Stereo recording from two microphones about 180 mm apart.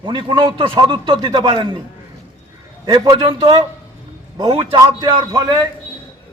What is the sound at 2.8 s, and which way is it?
A man's voice, 25° right (ahead or behind).